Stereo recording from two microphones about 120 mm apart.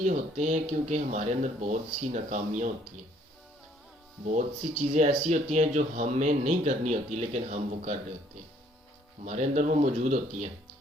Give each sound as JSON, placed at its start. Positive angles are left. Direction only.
{"t": 0.0, "sound": "speech", "side_deg": -75}
{"t": 4.8, "sound": "speech", "side_deg": -75}
{"t": 9.2, "sound": "speech", "side_deg": -80}